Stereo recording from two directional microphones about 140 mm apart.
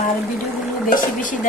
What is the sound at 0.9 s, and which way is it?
Speech, 65° left (ahead or behind).